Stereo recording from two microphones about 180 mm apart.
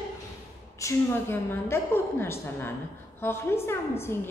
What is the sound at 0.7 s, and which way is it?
A woman's voice, 15° left (ahead or behind).